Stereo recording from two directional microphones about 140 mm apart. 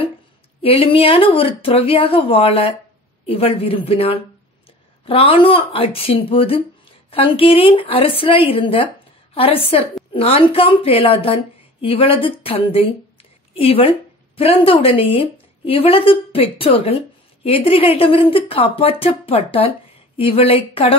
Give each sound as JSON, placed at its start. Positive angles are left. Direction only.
{"t": 0.6, "sound": "a woman's voice", "side_deg": 40}